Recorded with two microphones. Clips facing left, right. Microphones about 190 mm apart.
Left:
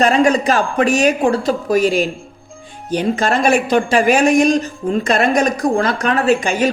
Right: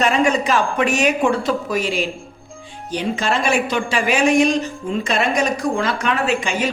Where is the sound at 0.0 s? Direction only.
35° left (ahead or behind).